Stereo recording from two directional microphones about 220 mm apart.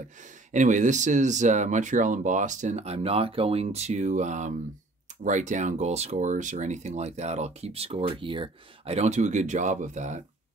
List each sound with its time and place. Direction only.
0.5 s speech: 35° right (ahead or behind)